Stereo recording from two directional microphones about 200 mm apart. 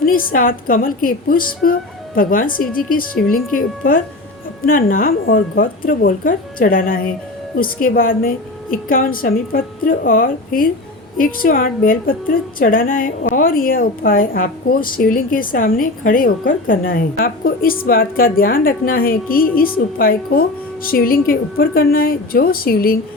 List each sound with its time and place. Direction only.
0.0 s a woman's voice: 45° left (ahead or behind)